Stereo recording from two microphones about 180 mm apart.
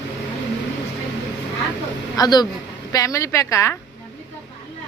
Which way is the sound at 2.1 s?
20° left (ahead or behind).